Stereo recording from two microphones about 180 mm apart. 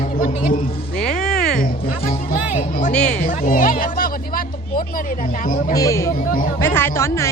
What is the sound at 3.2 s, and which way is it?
A woman's voice, 50° left (ahead or behind).